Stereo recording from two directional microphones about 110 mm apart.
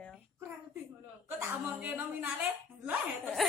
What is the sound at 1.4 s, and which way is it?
Speech, 15° right (ahead or behind).